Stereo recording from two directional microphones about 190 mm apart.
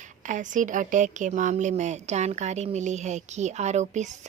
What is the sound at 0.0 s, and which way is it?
A woman's voice, 40° right (ahead or behind).